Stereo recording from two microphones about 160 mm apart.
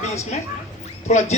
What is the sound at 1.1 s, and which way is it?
Speech, 45° left (ahead or behind).